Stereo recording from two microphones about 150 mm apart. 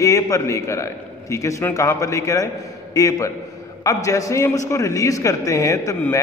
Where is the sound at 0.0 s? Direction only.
20° left (ahead or behind).